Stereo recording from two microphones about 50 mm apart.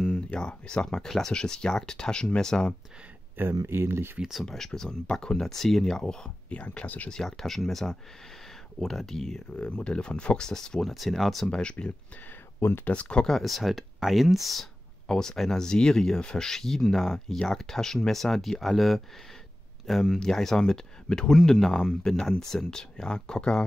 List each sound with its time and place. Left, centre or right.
0.0 s speech: centre
3.3 s speech: right
4.5 s speech: centre
6.5 s speech: left
7.1 s speech: centre
9.7 s speech: left; by 11.4 s centre
11.4 s speech: centre
12.5 s speech: left
12.9 s speech: left
13.3 s speech: centre
15.0 s speech: centre